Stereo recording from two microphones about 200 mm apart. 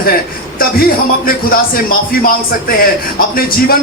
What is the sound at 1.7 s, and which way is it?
Speech, 45° left (ahead or behind).